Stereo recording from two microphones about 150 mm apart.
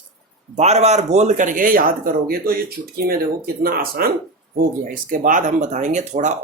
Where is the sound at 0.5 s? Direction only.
45° right (ahead or behind); by 1.8 s 65° right (ahead or behind).